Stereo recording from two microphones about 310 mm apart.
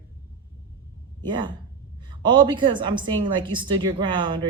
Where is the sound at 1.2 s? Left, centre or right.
Centre.